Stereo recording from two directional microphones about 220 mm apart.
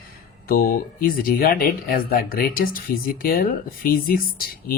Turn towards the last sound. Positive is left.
turn(degrees=40)  # may be behind; listen again after turning